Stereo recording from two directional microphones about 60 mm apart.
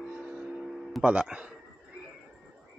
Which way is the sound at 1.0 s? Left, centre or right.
Centre.